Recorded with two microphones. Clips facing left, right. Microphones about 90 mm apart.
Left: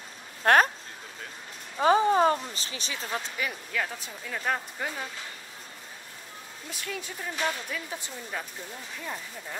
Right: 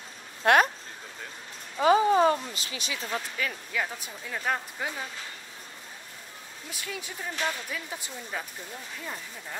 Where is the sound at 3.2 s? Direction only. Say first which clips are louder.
Even; 15° left (ahead or behind).